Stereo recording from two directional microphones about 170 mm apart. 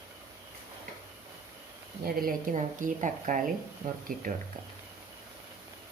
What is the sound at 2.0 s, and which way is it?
Speech, 55° right (ahead or behind).